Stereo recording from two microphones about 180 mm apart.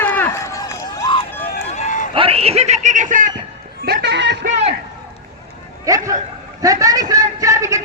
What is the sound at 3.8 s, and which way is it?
Music, 70° right (ahead or behind).